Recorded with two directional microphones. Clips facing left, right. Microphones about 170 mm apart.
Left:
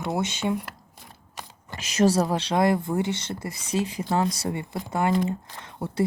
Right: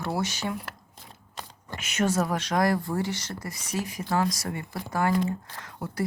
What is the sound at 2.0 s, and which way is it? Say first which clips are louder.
Speech: left 5 dB; 35° left (ahead or behind).